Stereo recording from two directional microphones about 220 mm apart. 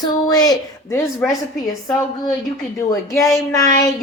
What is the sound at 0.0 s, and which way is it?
A woman's voice, 20° left (ahead or behind).